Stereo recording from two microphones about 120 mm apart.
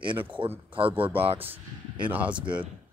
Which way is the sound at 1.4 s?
15° right (ahead or behind).